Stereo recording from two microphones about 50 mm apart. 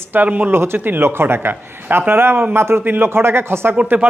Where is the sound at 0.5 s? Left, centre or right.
Right.